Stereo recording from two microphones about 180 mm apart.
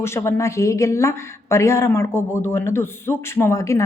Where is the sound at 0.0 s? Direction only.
15° left (ahead or behind).